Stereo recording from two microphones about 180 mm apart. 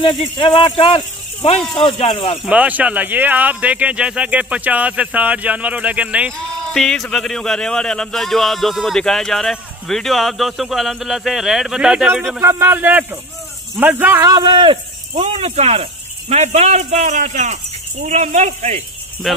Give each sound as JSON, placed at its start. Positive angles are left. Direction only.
{"t": 0.0, "sound": "speech", "side_deg": 30}
{"t": 2.4, "sound": "speech", "side_deg": -5}
{"t": 12.4, "sound": "speech", "side_deg": -15}
{"t": 14.3, "sound": "speech", "side_deg": -25}
{"t": 19.2, "sound": "speech", "side_deg": 0}